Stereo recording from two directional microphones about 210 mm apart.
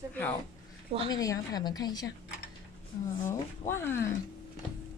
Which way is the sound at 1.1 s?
15° left (ahead or behind).